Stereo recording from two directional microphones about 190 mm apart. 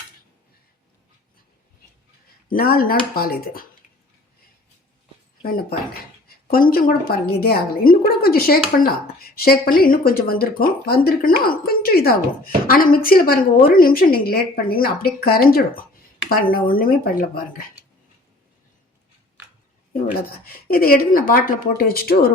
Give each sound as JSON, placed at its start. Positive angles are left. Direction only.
{"t": 2.5, "sound": "speech", "side_deg": 50}
{"t": 5.4, "sound": "speech", "side_deg": 50}
{"t": 20.1, "sound": "speech", "side_deg": 50}